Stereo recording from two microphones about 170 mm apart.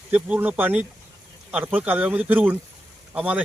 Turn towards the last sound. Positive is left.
turn(degrees=-5)  # may be behind; listen again after turning